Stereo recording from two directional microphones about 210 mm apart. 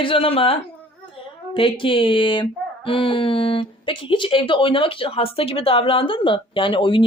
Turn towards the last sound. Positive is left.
turn(degrees=25)  # may be behind; listen again after turning